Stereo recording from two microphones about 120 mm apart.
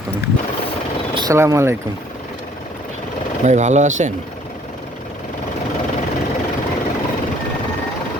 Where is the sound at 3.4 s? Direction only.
80° right.